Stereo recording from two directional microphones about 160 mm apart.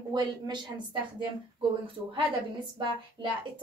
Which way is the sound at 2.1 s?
30° right (ahead or behind).